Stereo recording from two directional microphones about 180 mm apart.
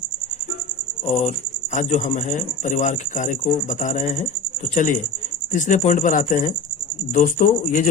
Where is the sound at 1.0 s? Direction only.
40° left (ahead or behind).